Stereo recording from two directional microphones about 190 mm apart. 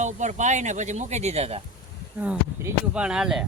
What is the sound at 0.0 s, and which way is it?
Speech, 40° right (ahead or behind).